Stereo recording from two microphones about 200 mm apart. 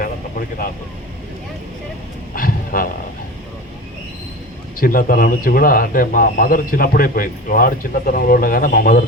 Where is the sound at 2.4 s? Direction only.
45° left (ahead or behind).